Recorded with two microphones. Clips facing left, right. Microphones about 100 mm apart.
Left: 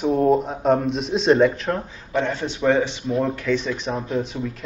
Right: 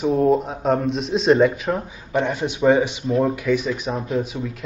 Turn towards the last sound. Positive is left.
turn(degrees=-5)  # may be behind; listen again after turning